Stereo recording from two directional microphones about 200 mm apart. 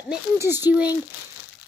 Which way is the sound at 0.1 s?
10° right (ahead or behind).